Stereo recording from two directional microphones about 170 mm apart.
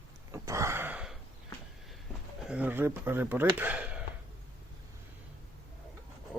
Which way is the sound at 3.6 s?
10° right (ahead or behind).